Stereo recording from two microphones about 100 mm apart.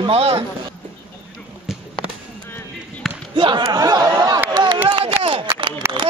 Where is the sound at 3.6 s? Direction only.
40° right (ahead or behind).